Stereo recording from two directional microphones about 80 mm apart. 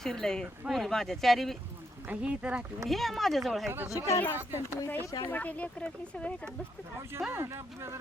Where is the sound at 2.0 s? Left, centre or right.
Centre.